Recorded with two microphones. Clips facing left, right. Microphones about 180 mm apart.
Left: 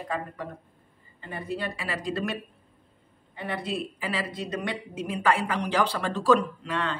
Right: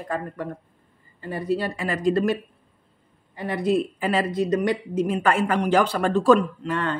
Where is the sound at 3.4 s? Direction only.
45° right (ahead or behind).